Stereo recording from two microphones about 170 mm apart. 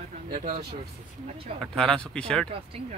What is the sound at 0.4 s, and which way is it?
Speech, 50° right (ahead or behind).